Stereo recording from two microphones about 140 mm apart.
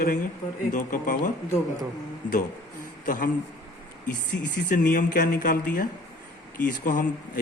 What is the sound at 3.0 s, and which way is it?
Speech, 70° left (ahead or behind).